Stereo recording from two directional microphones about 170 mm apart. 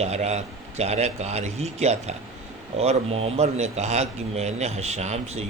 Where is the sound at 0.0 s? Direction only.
40° right (ahead or behind).